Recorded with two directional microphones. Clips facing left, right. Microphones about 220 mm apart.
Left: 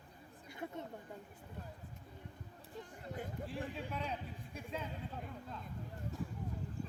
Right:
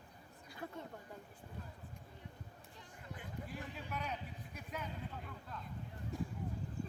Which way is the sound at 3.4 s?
30° left (ahead or behind).